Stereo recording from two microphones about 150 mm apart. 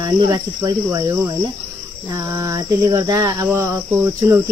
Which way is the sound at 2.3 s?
20° right (ahead or behind).